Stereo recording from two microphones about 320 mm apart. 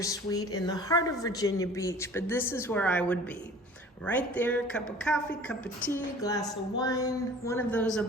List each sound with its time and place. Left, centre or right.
0.0 s a woman's voice: centre